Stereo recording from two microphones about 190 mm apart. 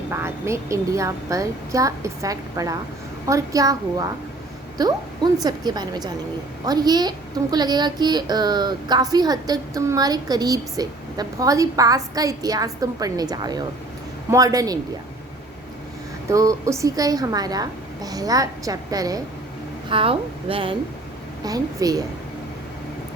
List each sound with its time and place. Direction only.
0.1 s a woman's voice: 15° right (ahead or behind)
16.3 s a woman's voice: 15° right (ahead or behind)